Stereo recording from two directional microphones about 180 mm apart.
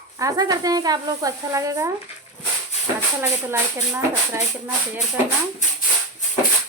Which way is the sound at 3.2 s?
15° right (ahead or behind).